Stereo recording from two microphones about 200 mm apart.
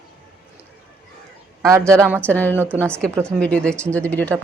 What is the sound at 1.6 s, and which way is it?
Speech, 15° right (ahead or behind).